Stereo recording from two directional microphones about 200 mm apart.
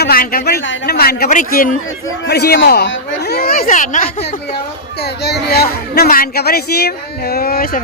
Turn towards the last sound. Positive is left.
turn(degrees=45)  # may be behind; listen again after turning